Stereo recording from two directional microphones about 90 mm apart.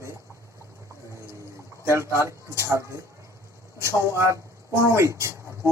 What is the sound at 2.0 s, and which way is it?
Speech, 30° right (ahead or behind).